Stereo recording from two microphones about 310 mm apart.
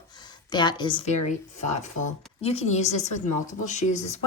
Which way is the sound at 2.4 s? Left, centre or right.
Centre.